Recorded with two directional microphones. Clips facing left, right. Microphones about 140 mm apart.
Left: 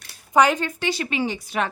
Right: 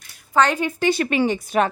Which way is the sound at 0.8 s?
55° right (ahead or behind).